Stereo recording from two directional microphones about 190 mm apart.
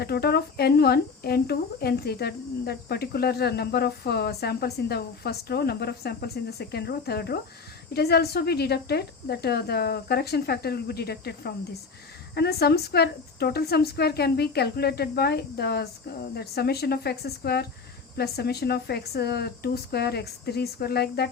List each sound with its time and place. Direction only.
0.0 s speech: 55° left (ahead or behind)